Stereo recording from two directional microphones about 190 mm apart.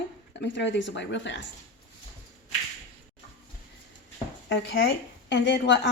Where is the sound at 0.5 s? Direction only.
70° left (ahead or behind).